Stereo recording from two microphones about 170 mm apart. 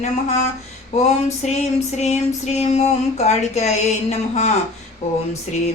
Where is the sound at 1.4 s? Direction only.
40° left (ahead or behind).